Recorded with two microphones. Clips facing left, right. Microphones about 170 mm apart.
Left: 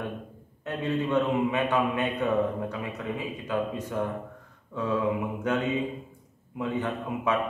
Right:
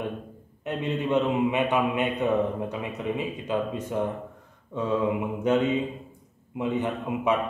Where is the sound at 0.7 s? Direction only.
20° right (ahead or behind).